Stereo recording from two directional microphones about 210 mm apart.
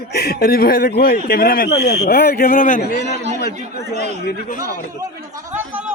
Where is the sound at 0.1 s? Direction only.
50° left (ahead or behind).